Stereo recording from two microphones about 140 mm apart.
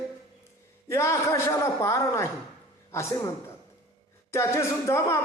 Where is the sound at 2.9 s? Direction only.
20° left (ahead or behind).